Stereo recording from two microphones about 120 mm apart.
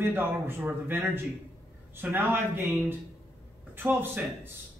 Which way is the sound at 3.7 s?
15° right (ahead or behind).